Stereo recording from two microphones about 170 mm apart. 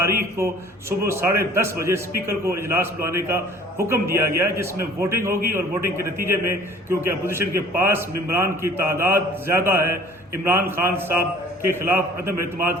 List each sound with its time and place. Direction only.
0.0 s a man's voice: 15° right (ahead or behind)